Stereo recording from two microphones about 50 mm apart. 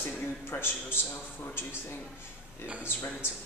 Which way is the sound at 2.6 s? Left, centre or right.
Right.